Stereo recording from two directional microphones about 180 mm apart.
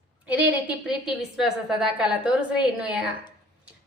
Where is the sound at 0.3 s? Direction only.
5° right (ahead or behind).